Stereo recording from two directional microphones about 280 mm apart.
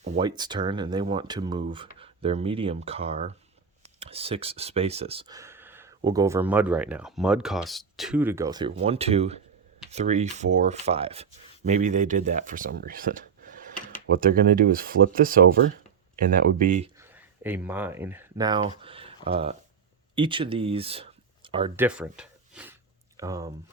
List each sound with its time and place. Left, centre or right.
0.0 s speech: right
17.0 s speech: centre
21.8 s a sound: centre